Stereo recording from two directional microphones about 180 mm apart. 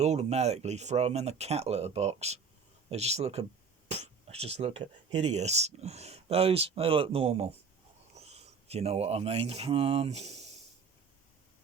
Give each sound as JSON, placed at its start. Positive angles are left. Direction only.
{"t": 0.0, "sound": "speech", "side_deg": -40}